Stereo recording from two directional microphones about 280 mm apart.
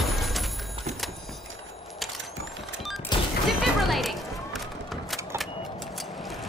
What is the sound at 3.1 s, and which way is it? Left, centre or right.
Music, centre.